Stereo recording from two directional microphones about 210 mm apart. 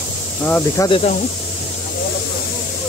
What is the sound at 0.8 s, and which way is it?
Speech, 25° left (ahead or behind).